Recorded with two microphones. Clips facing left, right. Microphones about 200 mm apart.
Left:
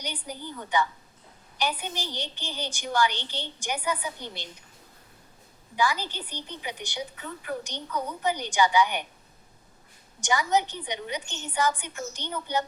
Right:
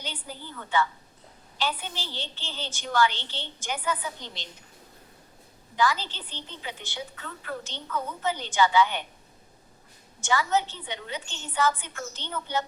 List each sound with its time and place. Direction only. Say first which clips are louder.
0.0 s a woman's voice: left 3 dB; 15° left (ahead or behind)
5.7 s a woman's voice: right 1 dB; 10° left (ahead or behind)
10.2 s a woman's voice: left 1 dB; 15° left (ahead or behind)